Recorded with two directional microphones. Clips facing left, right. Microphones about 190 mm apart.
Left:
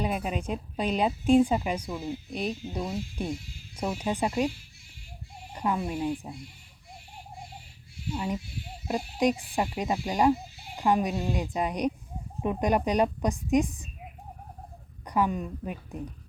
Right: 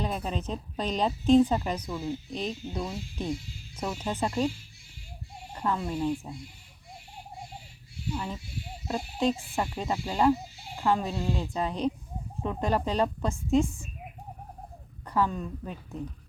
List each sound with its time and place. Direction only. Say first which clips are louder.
0.0 s a woman's voice: left 2 dB; 10° left (ahead or behind)
5.5 s a woman's voice: left 1 dB; 15° left (ahead or behind)
8.1 s a woman's voice: left 4 dB; 15° left (ahead or behind)
15.0 s a woman's voice: left 1 dB; 15° left (ahead or behind)